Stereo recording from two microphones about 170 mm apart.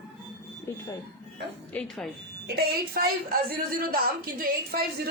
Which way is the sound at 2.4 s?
70° right (ahead or behind).